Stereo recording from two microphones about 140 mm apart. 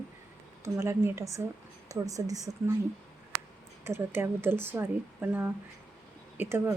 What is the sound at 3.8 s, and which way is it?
Speech, 15° right (ahead or behind).